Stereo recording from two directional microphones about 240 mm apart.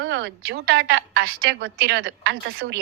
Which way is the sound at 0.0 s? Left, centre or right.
Right.